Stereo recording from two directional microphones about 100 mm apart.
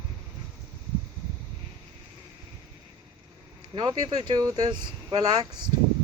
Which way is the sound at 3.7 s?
45° right (ahead or behind).